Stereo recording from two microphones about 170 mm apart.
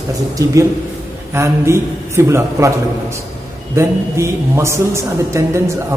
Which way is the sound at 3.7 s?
15° right (ahead or behind).